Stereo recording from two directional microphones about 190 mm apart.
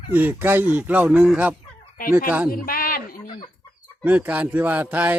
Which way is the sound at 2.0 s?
45° left (ahead or behind).